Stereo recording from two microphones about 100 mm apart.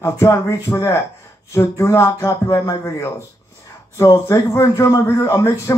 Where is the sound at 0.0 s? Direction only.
30° left (ahead or behind).